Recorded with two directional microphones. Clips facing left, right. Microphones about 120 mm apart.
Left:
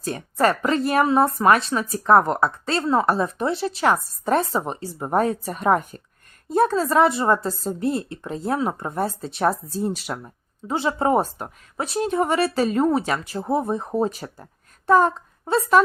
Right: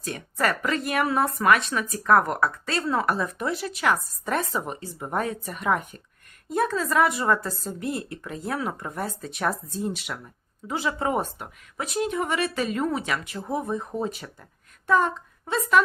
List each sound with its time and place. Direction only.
0.0 s a woman's voice: 35° left (ahead or behind)